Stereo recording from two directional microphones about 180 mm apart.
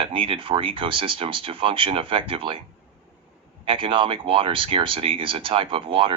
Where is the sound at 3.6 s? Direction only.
30° right (ahead or behind).